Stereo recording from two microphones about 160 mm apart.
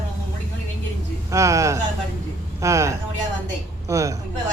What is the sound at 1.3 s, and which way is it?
A man's voice, 20° right (ahead or behind).